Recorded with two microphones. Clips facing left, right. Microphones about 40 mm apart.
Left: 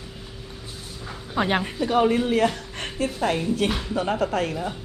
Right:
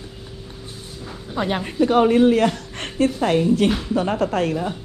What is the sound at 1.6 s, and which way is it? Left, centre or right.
A woman's voice, right.